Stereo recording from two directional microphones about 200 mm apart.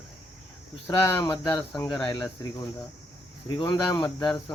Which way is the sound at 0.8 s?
15° left (ahead or behind).